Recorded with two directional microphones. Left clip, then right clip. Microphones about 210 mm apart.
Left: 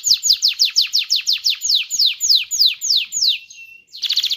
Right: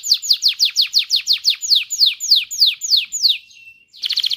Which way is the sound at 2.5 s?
25° right (ahead or behind).